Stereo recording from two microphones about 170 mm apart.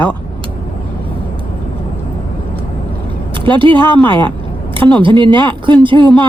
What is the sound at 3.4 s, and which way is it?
Speech, 30° right (ahead or behind).